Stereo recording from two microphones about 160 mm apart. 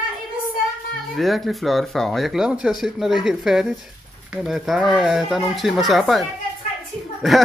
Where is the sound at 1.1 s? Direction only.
Centre (ahead or behind).